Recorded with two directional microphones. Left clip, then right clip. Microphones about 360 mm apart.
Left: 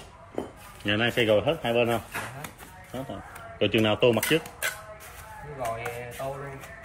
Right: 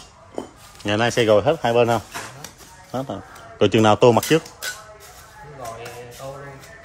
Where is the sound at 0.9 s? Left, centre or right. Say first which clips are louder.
Right 7 dB; right.